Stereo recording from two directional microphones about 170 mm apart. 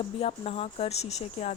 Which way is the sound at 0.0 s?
35° left (ahead or behind).